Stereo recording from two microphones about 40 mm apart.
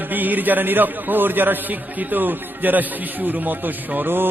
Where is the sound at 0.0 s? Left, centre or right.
Right.